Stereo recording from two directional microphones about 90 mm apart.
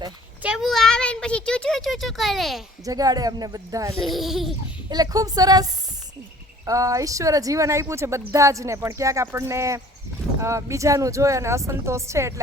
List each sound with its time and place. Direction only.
0.6 s a sound: centre (ahead or behind)
2.8 s speech: 45° right (ahead or behind)
4.0 s speech: centre (ahead or behind)
4.9 s speech: 45° right (ahead or behind)